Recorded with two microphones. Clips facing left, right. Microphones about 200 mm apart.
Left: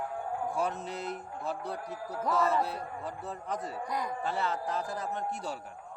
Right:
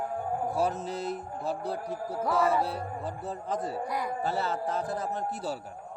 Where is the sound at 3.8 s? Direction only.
5° right (ahead or behind).